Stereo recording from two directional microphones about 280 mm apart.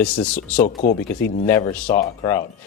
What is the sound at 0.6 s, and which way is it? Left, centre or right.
Speech, left.